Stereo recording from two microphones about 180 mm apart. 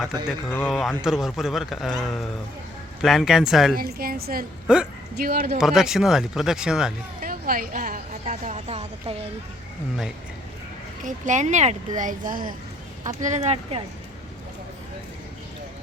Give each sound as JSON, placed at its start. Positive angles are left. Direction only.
{"t": 0.4, "sound": "speech", "side_deg": 10}
{"t": 0.7, "sound": "speech", "side_deg": 0}
{"t": 3.8, "sound": "a woman's voice", "side_deg": -55}
{"t": 4.6, "sound": "speech", "side_deg": -5}
{"t": 5.2, "sound": "a woman's voice", "side_deg": -55}
{"t": 5.5, "sound": "speech", "side_deg": -5}
{"t": 7.2, "sound": "a woman's voice", "side_deg": -55}
{"t": 11.0, "sound": "speech", "side_deg": -40}
{"t": 13.2, "sound": "a woman's voice", "side_deg": -40}